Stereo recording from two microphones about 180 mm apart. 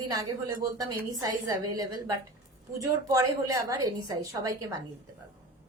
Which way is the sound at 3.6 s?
20° right (ahead or behind).